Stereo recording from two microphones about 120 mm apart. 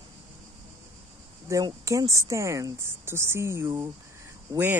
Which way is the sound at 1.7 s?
30° right (ahead or behind).